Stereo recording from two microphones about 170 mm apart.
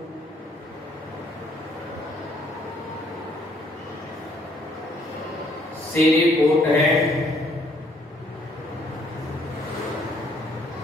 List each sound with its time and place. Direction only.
5.9 s speech: centre (ahead or behind)